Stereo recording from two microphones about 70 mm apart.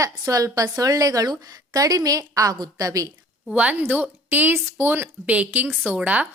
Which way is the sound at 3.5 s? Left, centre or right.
Centre.